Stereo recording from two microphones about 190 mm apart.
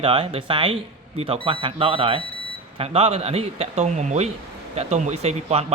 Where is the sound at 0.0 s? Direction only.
30° right (ahead or behind).